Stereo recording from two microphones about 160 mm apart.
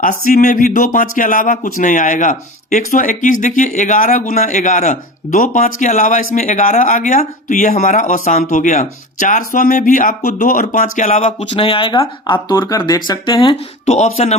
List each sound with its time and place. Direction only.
0.0 s speech: 60° left (ahead or behind); by 13.6 s 30° left (ahead or behind)
13.8 s speech: 45° left (ahead or behind)